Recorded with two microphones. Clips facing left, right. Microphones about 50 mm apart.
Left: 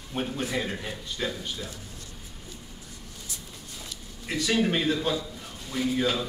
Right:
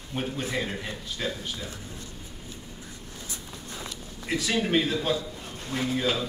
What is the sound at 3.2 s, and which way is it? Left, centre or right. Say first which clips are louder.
Vehicle: right 4 dB; right.